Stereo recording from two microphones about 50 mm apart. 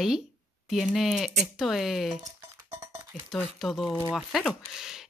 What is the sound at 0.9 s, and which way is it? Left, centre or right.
Speech, centre.